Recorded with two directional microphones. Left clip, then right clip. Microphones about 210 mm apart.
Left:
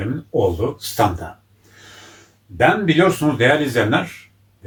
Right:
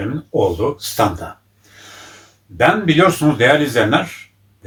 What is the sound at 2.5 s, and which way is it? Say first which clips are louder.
Speech: right 2 dB; 10° right (ahead or behind).